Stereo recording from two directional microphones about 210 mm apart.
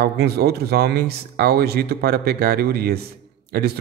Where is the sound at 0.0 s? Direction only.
50° right (ahead or behind).